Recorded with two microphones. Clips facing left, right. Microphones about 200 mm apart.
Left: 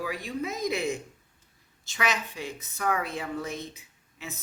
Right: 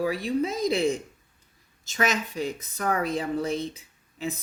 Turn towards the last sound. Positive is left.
turn(degrees=-35)  # may be behind; listen again after turning